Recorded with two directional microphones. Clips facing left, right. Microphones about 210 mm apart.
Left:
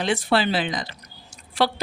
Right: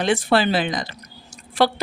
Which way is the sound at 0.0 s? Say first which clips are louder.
Right 3 dB; 50° right (ahead or behind).